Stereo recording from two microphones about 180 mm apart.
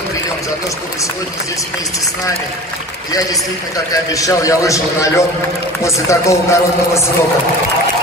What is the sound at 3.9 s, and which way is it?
A man's voice, 20° left (ahead or behind).